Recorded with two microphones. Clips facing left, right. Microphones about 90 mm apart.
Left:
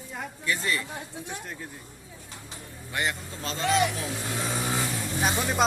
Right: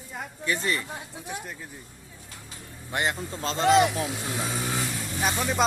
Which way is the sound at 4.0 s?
5° right (ahead or behind).